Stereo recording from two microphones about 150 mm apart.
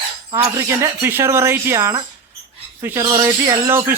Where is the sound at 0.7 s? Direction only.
15° right (ahead or behind).